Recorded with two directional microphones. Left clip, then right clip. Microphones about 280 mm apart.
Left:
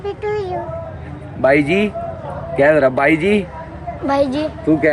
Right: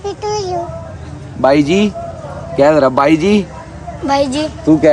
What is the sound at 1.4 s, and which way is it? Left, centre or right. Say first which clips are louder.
A woman's voice: right 3 dB; centre.